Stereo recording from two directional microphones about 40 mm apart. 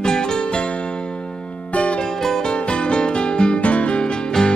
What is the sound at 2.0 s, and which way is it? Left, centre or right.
Music, centre.